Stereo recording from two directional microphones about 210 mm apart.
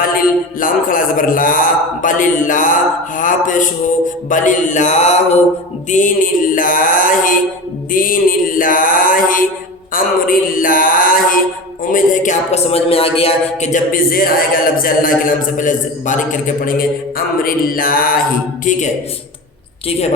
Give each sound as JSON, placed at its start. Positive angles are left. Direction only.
{"t": 0.0, "sound": "speech", "side_deg": 40}